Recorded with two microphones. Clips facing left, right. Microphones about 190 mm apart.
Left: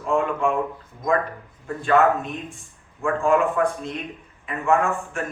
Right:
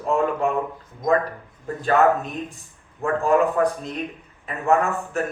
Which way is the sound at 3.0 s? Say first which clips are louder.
Right 1 dB; 40° right (ahead or behind).